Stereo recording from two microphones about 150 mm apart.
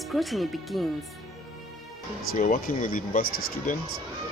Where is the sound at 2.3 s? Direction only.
65° left (ahead or behind).